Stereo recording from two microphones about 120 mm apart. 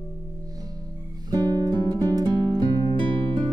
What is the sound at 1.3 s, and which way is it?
Music, 35° right (ahead or behind).